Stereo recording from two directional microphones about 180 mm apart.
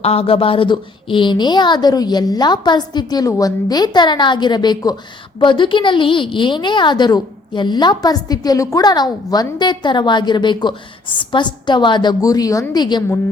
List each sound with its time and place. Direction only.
0.0 s a woman's voice: 35° left (ahead or behind)